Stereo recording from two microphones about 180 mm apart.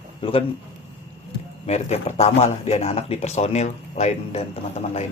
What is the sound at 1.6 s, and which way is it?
Speech, 35° left (ahead or behind).